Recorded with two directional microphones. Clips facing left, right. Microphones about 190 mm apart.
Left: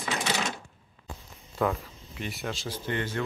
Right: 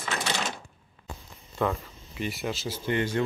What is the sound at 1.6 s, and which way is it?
Speech, centre (ahead or behind).